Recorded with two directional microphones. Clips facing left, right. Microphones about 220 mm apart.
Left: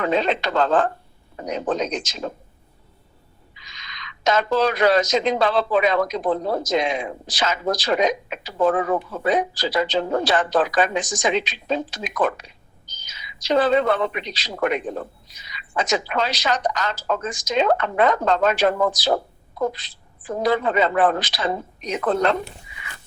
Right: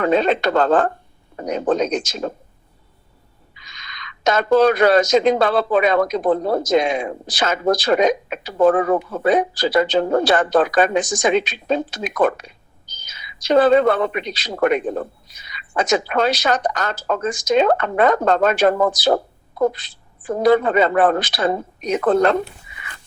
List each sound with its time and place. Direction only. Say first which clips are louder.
0.0 s speech: right 5 dB; 50° right (ahead or behind)
3.5 s speech: right 2 dB; 50° right (ahead or behind)